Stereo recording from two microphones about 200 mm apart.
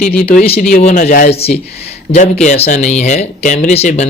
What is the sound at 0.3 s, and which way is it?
Speech, 30° left (ahead or behind).